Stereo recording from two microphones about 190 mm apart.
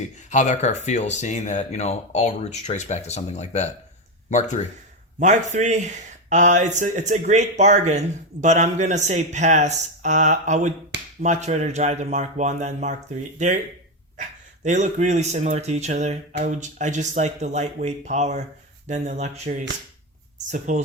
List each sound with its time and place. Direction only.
0.3 s speech: 40° left (ahead or behind)
5.2 s speech: 40° right (ahead or behind)